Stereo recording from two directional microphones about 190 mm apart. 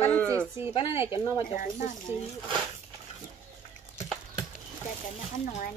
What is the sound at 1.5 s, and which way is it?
Speech, 45° left (ahead or behind).